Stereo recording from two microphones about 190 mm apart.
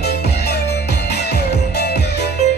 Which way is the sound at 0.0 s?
60° left (ahead or behind).